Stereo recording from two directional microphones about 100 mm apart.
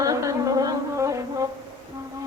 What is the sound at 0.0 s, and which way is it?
Music, 35° right (ahead or behind).